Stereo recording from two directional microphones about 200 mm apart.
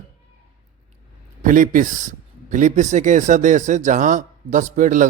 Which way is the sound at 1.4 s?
40° right (ahead or behind).